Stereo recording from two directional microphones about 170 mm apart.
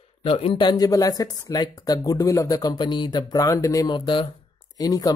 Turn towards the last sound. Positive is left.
turn(degrees=20)  # may be behind; listen again after turning